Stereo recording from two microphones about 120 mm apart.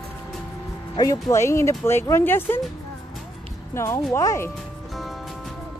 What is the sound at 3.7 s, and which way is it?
Speech, 20° left (ahead or behind).